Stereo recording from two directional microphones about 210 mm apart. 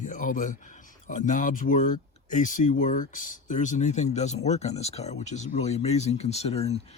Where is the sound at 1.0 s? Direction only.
40° left (ahead or behind).